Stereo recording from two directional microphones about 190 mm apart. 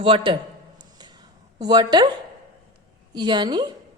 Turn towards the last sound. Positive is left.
turn(degrees=-20)  # may be behind; listen again after turning